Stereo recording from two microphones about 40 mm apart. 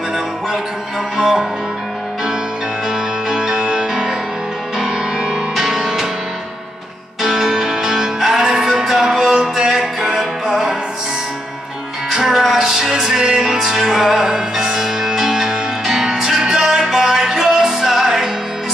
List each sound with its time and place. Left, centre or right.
1.1 s music: centre
2.9 s music: centre
7.2 s music: centre
12.1 s music: centre